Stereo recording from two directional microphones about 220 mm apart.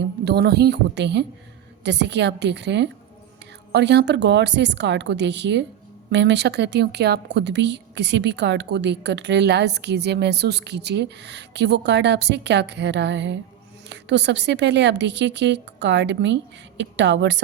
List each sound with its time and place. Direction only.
0.3 s speech: 50° right (ahead or behind)